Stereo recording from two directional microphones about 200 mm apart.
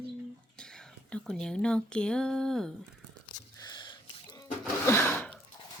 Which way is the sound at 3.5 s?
20° left (ahead or behind).